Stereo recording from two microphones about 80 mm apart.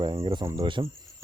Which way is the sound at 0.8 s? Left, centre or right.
Right.